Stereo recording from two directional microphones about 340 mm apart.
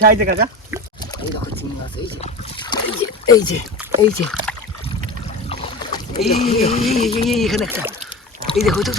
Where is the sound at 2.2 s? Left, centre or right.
Centre.